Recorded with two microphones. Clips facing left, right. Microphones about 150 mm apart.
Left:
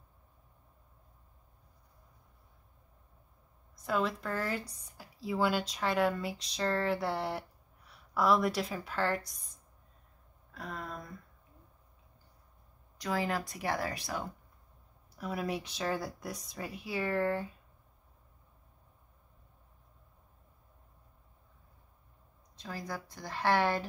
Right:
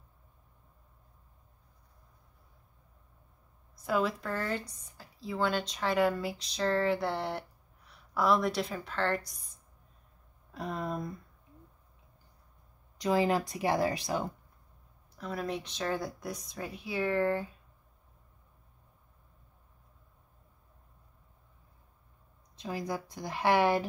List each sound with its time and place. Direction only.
3.7 s speech: 5° right (ahead or behind)
10.5 s speech: 20° right (ahead or behind)
12.9 s speech: 20° right (ahead or behind)
15.1 s speech: 10° left (ahead or behind)
22.6 s a woman's voice: 15° right (ahead or behind)